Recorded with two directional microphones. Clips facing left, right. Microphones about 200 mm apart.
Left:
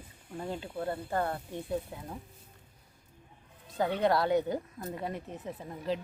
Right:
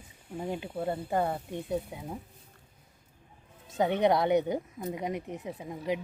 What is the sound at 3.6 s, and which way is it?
Speech, 20° right (ahead or behind).